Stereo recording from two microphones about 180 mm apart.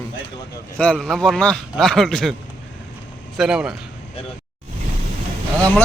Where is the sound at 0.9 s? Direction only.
Centre (ahead or behind).